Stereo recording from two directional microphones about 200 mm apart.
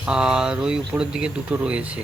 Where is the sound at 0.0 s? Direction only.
5° right (ahead or behind).